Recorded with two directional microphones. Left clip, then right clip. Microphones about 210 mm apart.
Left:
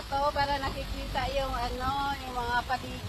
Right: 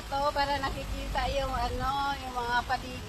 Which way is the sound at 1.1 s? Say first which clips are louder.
Even; 10° left (ahead or behind).